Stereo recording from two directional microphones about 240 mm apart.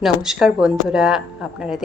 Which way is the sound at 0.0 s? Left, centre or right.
Centre.